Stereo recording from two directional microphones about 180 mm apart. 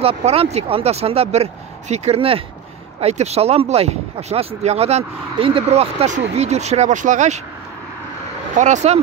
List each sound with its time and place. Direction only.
0.0 s speech: 35° right (ahead or behind)
8.5 s speech: 40° right (ahead or behind)